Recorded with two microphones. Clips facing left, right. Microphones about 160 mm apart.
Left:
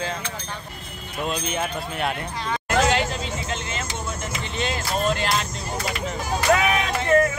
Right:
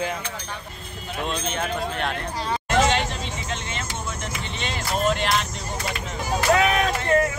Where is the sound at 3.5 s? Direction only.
Centre (ahead or behind).